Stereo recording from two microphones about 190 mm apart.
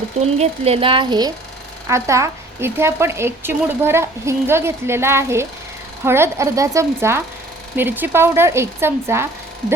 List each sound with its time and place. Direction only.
0.3 s speech: 35° right (ahead or behind)
1.9 s a woman's voice: 15° right (ahead or behind)